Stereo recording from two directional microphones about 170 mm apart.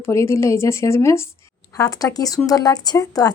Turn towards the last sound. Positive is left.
turn(degrees=20)  # may be behind; listen again after turning